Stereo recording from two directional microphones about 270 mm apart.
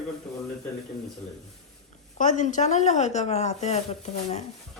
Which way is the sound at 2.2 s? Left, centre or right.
Left.